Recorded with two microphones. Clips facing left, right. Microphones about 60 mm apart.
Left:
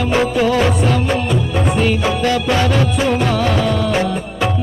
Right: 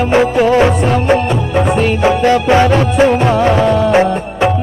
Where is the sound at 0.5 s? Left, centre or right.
Right.